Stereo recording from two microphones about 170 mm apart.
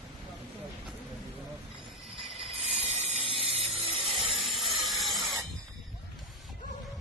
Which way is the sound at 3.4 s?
30° right (ahead or behind).